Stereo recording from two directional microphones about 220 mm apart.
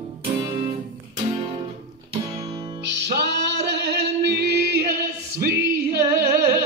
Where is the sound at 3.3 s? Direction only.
50° right (ahead or behind).